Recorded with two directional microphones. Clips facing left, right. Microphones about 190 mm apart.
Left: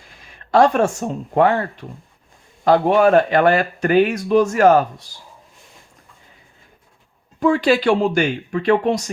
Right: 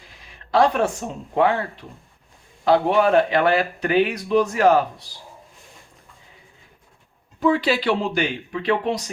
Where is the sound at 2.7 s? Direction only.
45° left (ahead or behind).